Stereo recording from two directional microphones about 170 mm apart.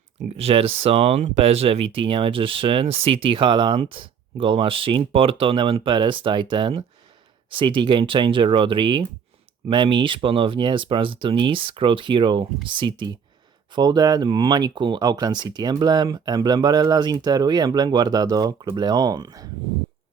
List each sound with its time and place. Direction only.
0.3 s speech: 35° right (ahead or behind)